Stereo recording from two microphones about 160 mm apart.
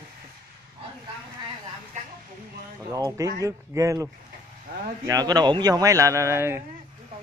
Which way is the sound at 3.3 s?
20° right (ahead or behind).